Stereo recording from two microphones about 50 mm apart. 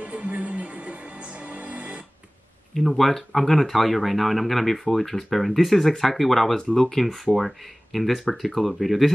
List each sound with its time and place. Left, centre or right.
0.0 s music: right
2.7 s speech: centre